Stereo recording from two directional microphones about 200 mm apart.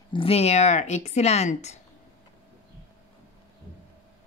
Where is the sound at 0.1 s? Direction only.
30° left (ahead or behind).